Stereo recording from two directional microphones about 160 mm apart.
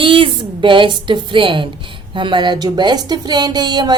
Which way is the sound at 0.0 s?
30° right (ahead or behind).